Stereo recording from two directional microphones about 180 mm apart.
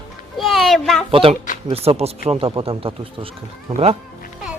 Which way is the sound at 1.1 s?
30° right (ahead or behind).